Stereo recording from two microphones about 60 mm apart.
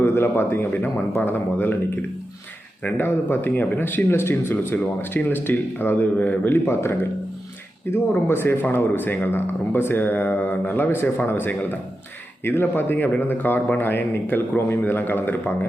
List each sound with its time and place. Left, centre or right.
0.0 s speech: left
2.8 s speech: left
6.7 s speech: left